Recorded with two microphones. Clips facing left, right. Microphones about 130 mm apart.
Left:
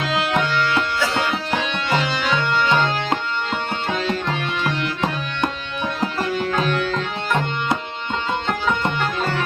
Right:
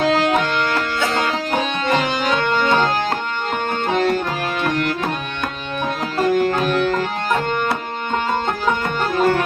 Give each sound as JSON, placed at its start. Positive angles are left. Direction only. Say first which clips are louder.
{"t": 0.0, "sound": "music", "louder": "right 5 dB", "side_deg": -40}
{"t": 9.0, "sound": "music", "louder": "right 6 dB", "side_deg": -45}